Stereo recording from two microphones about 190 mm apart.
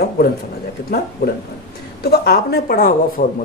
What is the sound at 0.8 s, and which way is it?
A woman's voice, 55° left (ahead or behind).